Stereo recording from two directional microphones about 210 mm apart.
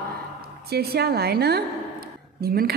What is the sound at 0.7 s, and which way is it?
A woman's voice, 50° right (ahead or behind).